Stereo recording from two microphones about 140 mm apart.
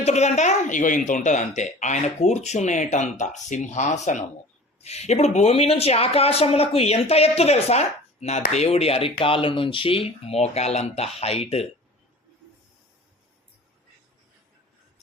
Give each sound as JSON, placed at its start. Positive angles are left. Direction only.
{"t": 0.0, "sound": "a man's voice", "side_deg": 55}